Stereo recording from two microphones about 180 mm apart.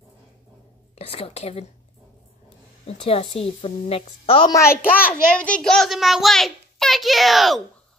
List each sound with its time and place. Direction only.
0.9 s a woman's voice: 35° left (ahead or behind)
2.9 s a woman's voice: 35° left (ahead or behind); by 7.6 s centre (ahead or behind)